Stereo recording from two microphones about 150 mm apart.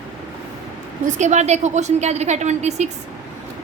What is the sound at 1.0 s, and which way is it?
A woman's voice, 50° right (ahead or behind).